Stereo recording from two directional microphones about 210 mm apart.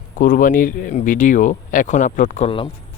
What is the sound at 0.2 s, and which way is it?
Speech, 40° left (ahead or behind).